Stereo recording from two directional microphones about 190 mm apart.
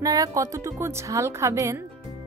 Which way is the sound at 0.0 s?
20° right (ahead or behind).